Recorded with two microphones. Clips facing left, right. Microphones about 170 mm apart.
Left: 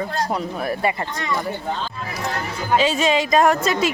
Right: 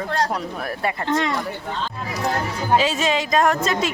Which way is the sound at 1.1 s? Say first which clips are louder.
Right 8 dB; 90° right.